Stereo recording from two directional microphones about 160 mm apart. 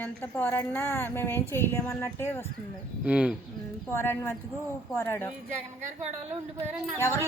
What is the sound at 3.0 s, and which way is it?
Speech, 5° right (ahead or behind).